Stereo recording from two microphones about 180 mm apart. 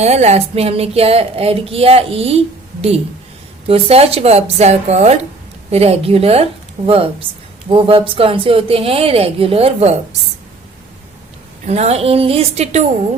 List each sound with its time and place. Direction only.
0.0 s a woman's voice: 40° right (ahead or behind)
3.7 s a woman's voice: 35° right (ahead or behind)
11.6 s a woman's voice: 35° right (ahead or behind)